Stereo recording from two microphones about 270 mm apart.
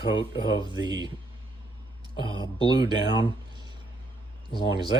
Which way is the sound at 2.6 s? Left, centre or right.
Centre.